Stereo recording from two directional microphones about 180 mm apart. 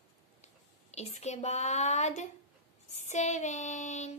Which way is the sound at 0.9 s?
40° left (ahead or behind).